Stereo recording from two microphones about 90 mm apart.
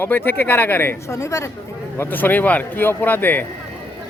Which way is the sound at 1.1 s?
35° left (ahead or behind).